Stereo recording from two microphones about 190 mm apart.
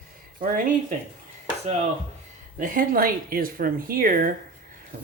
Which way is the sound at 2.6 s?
50° right (ahead or behind).